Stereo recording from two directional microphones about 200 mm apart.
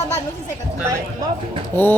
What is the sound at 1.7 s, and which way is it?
Speech, 10° left (ahead or behind).